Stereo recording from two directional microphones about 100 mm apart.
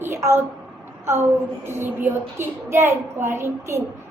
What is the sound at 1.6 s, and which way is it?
A woman's voice, 25° right (ahead or behind).